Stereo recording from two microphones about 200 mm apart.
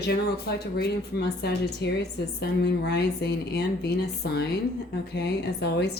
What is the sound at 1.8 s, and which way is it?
A woman's voice, 60° left (ahead or behind).